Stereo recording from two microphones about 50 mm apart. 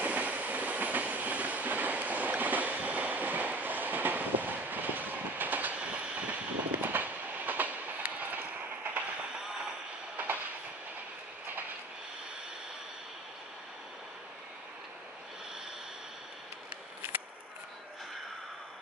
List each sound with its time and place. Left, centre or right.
0.0 s train: right
9.3 s train: centre